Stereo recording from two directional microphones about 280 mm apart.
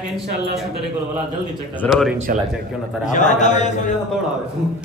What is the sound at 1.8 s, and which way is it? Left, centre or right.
Speech, centre.